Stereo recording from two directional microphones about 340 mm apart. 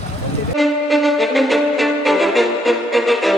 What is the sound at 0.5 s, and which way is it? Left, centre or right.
Violin, centre.